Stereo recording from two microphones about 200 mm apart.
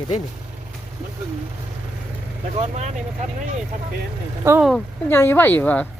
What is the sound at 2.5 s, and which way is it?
Speech, 35° right (ahead or behind).